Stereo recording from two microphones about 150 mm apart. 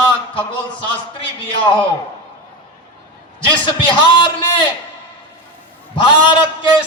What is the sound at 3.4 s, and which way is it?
Speech, 35° left (ahead or behind).